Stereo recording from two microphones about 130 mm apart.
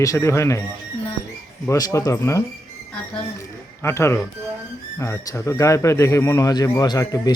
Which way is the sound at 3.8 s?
20° left (ahead or behind).